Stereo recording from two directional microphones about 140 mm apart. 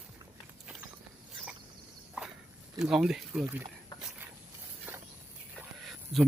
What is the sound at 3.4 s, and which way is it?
Speech, 20° right (ahead or behind).